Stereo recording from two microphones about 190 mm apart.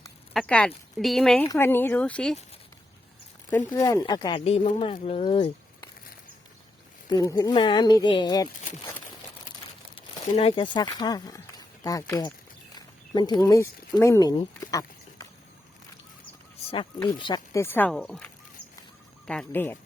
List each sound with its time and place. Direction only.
0.3 s speech: 5° left (ahead or behind)
3.7 s speech: 20° left (ahead or behind)
7.1 s speech: 20° left (ahead or behind)
10.3 s speech: 30° left (ahead or behind)
16.7 s speech: 25° left (ahead or behind); by 18.3 s 5° left (ahead or behind)
19.3 s speech: 5° left (ahead or behind)